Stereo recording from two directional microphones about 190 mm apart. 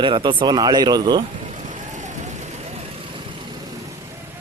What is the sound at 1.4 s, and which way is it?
Vehicle, 40° right (ahead or behind).